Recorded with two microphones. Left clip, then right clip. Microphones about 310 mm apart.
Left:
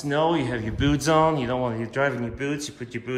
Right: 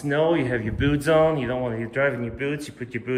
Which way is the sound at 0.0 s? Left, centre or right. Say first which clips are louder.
Right 1 dB; centre.